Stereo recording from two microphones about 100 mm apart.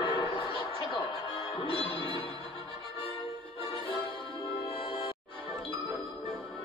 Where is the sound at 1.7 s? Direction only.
55° right (ahead or behind).